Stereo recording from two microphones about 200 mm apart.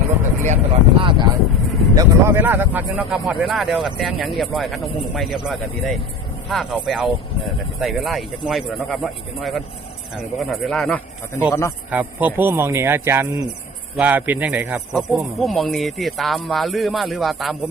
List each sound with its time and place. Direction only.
0.4 s speech: 30° right (ahead or behind)
2.0 s speech: 10° right (ahead or behind); by 11.4 s 5° left (ahead or behind)
11.9 s speech: 10° right (ahead or behind)